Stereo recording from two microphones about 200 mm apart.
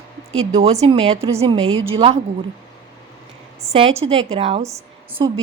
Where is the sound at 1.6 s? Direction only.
90° right.